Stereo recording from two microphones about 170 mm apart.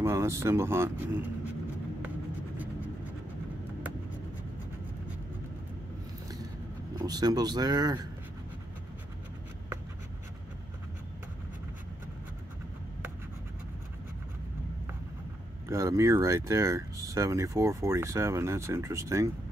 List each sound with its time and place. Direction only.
0.0 s speech: 15° right (ahead or behind)
7.0 s speech: 25° right (ahead or behind)
15.7 s speech: 15° right (ahead or behind)